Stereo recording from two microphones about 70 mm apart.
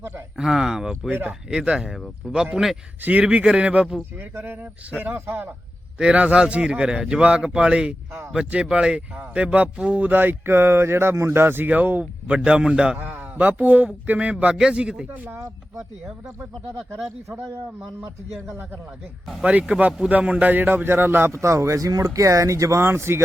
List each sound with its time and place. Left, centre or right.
0.3 s a man's voice: centre
3.0 s a man's voice: centre
4.2 s speech: right
6.0 s a man's voice: centre
12.5 s a man's voice: centre
13.0 s a man's voice: right
15.0 s speech: right
15.8 s a man's voice: centre
16.4 s a man's voice: right
18.4 s a man's voice: right
19.4 s a man's voice: centre; by 23.2 s right